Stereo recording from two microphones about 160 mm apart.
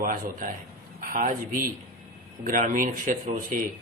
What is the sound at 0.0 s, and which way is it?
Speech, 55° right (ahead or behind).